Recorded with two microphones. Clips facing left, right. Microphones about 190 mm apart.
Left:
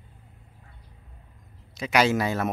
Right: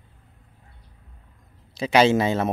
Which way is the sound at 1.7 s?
30° right (ahead or behind).